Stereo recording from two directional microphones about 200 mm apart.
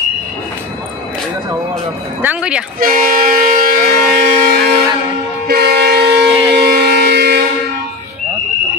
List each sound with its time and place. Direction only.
2.2 s speech: 5° right (ahead or behind)
2.8 s a sound: 45° right (ahead or behind)
5.5 s vehicle: 50° right (ahead or behind)